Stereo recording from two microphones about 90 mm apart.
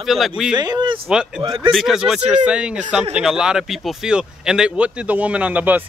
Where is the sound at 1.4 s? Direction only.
65° right (ahead or behind).